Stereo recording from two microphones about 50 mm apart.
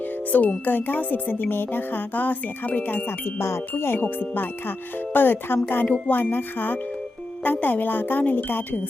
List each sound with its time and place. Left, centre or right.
0.3 s speech: left
0.7 s speech: left
3.1 s music: left
4.0 s speech: left
5.1 s music: left
5.7 s speech: left